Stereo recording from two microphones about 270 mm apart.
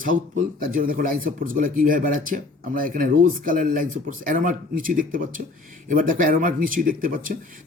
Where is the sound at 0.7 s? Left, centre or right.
Right.